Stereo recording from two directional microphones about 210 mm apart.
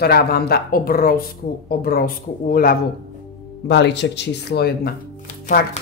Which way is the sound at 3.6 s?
55° left (ahead or behind).